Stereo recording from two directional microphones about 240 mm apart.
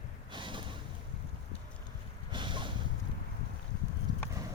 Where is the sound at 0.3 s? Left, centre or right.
Centre.